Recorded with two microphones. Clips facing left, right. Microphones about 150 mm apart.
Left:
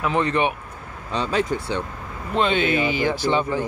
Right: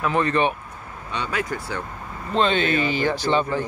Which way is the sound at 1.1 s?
30° left (ahead or behind).